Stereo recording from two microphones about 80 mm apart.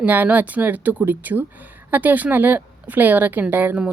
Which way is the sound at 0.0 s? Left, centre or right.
Right.